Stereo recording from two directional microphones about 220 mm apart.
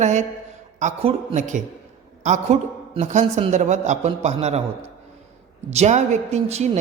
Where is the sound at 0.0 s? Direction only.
30° right (ahead or behind).